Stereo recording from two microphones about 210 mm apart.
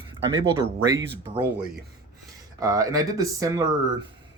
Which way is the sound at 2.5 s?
15° right (ahead or behind).